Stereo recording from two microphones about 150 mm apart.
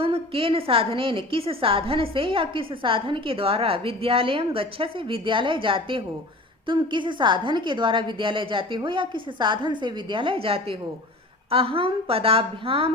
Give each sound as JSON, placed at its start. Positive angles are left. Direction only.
{"t": 0.0, "sound": "a woman's voice", "side_deg": -35}